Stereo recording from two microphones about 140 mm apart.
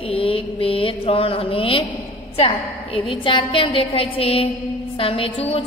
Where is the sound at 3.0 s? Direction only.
40° left (ahead or behind).